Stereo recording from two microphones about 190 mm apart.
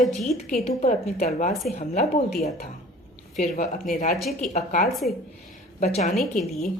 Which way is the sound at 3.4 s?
45° left (ahead or behind).